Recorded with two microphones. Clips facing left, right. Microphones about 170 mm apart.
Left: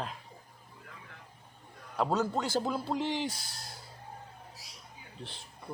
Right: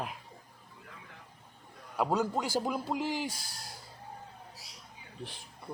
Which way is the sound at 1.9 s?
10° right (ahead or behind).